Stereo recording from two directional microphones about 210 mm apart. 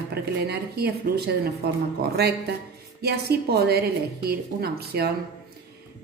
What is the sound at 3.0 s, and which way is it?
Speech, 50° right (ahead or behind).